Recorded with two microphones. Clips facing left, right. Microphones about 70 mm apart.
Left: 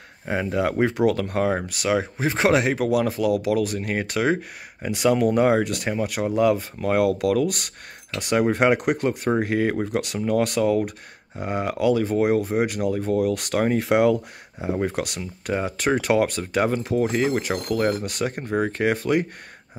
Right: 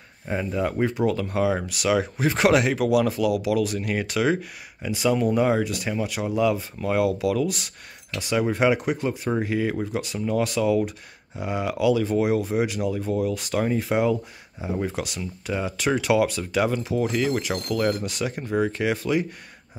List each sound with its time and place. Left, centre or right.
0.2 s speech: left
1.7 s speech: left
4.9 s speech: left